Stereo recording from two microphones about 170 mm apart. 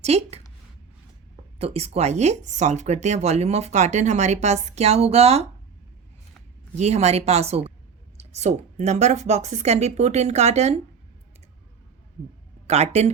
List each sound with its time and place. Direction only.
0.0 s a woman's voice: 40° right (ahead or behind)
1.5 s speech: 35° right (ahead or behind)
6.7 s speech: 40° right (ahead or behind)
12.6 s speech: 40° right (ahead or behind)